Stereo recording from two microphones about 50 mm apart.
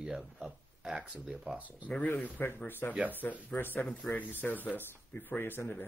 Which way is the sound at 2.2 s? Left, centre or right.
Left.